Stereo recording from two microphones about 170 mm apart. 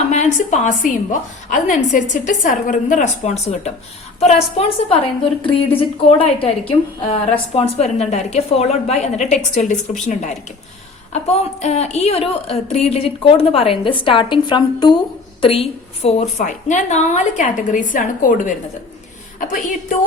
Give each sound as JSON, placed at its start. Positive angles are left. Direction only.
{"t": 0.1, "sound": "a woman's voice", "side_deg": 45}
{"t": 5.4, "sound": "a woman's voice", "side_deg": 30}